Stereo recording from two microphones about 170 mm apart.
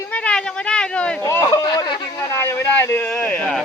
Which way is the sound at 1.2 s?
20° left (ahead or behind).